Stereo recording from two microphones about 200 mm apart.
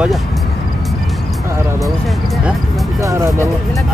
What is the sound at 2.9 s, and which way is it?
Speech, 15° right (ahead or behind).